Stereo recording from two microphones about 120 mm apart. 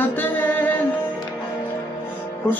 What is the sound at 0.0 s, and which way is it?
Music, 15° left (ahead or behind).